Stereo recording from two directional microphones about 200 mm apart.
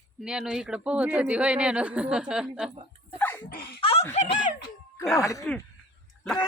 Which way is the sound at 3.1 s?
10° left (ahead or behind).